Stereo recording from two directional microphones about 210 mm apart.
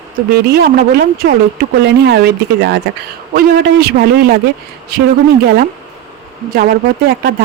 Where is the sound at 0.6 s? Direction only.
45° right (ahead or behind).